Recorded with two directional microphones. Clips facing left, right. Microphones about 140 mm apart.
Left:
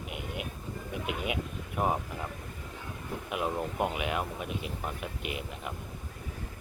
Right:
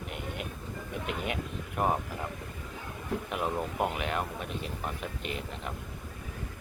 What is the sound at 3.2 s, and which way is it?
Speech, 5° left (ahead or behind).